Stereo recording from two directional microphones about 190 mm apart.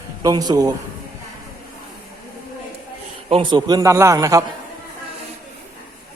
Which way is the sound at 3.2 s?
25° right (ahead or behind).